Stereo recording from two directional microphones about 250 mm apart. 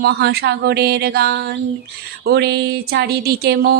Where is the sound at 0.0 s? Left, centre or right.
Right.